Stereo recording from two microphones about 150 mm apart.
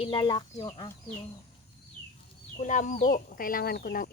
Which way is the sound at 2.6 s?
60° left (ahead or behind).